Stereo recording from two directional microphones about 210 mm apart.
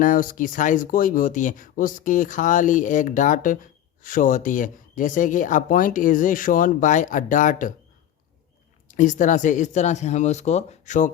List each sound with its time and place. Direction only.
0.0 s speech: 40° left (ahead or behind)
8.9 s speech: 35° left (ahead or behind)